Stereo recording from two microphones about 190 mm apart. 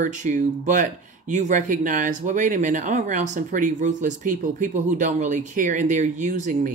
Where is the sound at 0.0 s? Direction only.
40° right (ahead or behind).